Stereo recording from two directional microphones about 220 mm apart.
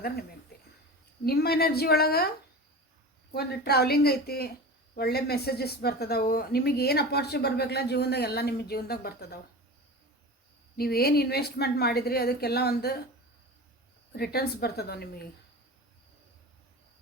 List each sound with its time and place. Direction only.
1.2 s speech: 45° left (ahead or behind)
3.3 s speech: 45° left (ahead or behind)
10.8 s speech: 45° left (ahead or behind)
14.1 s speech: 45° left (ahead or behind)